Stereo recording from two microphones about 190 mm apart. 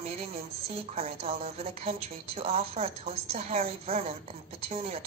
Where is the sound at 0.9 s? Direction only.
30° right (ahead or behind).